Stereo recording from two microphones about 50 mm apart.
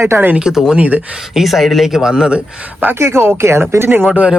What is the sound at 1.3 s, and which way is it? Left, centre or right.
Speech, centre.